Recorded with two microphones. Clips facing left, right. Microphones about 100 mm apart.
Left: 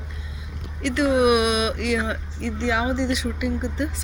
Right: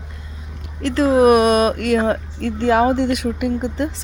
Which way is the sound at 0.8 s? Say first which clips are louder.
Right 5 dB; 35° right (ahead or behind).